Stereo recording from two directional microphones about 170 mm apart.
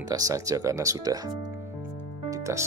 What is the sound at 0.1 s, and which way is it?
Speech, 20° right (ahead or behind).